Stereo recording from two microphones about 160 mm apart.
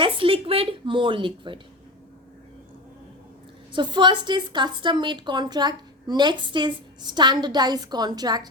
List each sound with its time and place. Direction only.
0.0 s speech: 35° right (ahead or behind)
3.7 s a woman's voice: 30° right (ahead or behind)